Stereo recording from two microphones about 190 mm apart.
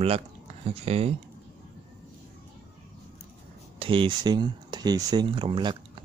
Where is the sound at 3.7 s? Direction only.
25° right (ahead or behind).